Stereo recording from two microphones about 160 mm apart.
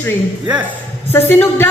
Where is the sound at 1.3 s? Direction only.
10° left (ahead or behind).